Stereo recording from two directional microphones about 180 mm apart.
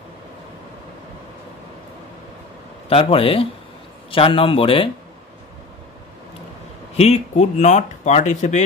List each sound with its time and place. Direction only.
2.9 s a man's voice: 30° left (ahead or behind)
7.0 s speech: 35° left (ahead or behind)